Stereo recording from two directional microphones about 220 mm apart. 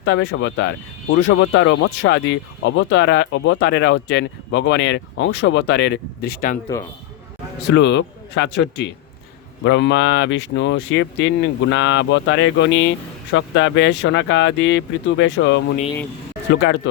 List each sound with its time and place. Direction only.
0.0 s speech: 55° left (ahead or behind)
7.7 s a man's voice: 55° left (ahead or behind)
9.6 s speech: 55° left (ahead or behind)